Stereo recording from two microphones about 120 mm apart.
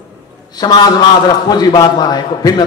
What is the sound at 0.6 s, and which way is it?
A man's voice, 35° left (ahead or behind).